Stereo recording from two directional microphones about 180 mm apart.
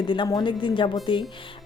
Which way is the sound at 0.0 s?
25° left (ahead or behind).